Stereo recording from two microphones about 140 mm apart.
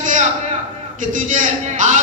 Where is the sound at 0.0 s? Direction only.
65° right (ahead or behind).